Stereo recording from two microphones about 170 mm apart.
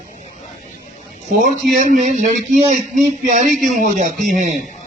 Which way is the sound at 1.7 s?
50° right (ahead or behind).